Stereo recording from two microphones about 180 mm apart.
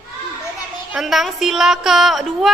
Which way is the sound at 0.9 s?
Centre (ahead or behind).